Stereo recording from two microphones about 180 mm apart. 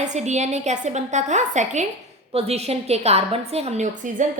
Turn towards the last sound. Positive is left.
turn(degrees=-40)  # may be behind; listen again after turning